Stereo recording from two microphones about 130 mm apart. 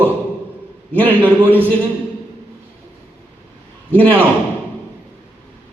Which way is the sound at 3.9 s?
15° left (ahead or behind).